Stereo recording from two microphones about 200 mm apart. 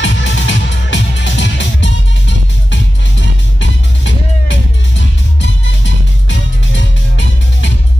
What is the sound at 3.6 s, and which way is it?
Music, 65° left (ahead or behind).